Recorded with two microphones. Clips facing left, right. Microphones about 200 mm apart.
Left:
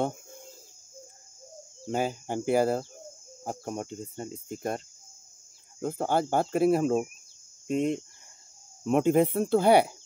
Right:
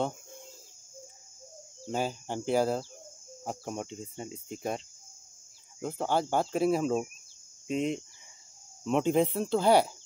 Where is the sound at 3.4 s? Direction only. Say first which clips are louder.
Left 2 dB; centre (ahead or behind).